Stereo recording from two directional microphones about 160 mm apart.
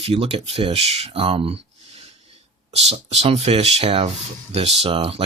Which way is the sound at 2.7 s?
40° right (ahead or behind).